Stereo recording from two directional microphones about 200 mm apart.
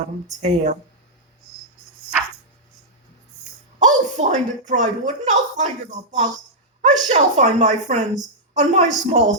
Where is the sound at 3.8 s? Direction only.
35° right (ahead or behind).